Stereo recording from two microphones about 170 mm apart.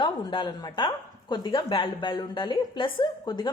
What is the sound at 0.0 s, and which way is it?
Speech, 30° left (ahead or behind).